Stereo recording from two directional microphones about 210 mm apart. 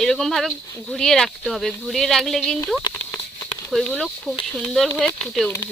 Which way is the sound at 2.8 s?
10° left (ahead or behind).